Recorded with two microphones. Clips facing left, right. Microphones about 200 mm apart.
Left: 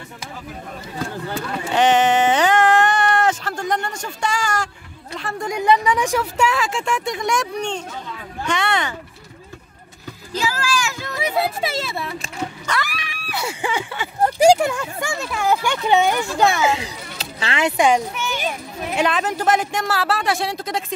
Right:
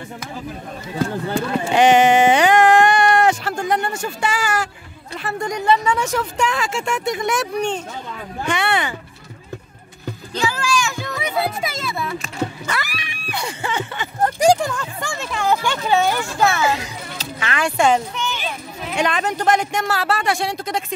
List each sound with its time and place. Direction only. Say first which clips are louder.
1.3 s a sound: right 2 dB; 10° right (ahead or behind)
5.1 s speech: right 2 dB; 5° right (ahead or behind)
5.5 s speech: left 1 dB; 15° left (ahead or behind); by 8.9 s 10° right (ahead or behind)
10.3 s a sound: right 1 dB; 5° left (ahead or behind)
11.6 s a child's voice: left 1 dB; 30° left (ahead or behind)
12.6 s a child's voice: left 1 dB; 5° right (ahead or behind)